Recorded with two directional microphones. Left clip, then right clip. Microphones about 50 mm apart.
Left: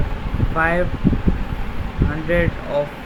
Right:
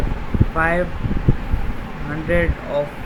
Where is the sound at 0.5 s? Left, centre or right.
Centre.